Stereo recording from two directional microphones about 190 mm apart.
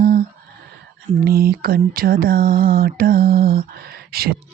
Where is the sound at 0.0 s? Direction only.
50° right (ahead or behind).